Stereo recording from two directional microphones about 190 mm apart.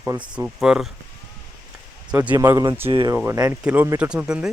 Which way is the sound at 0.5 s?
Centre (ahead or behind).